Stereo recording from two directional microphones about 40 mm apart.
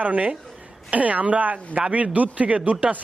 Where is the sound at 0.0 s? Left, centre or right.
Right.